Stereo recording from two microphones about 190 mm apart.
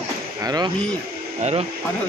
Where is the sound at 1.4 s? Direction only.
30° right (ahead or behind).